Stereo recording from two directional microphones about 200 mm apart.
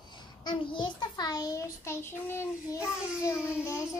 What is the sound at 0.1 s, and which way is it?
A child's voice, 20° left (ahead or behind).